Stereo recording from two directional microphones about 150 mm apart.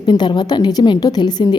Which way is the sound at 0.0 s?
30° left (ahead or behind).